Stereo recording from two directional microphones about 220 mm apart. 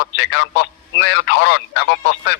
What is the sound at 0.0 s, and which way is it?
A man's voice, 50° left (ahead or behind).